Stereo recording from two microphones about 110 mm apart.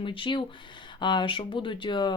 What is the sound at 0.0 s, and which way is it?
Speech, 50° left (ahead or behind).